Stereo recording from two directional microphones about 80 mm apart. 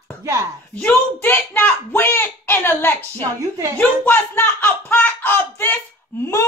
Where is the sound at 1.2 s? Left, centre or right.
Left.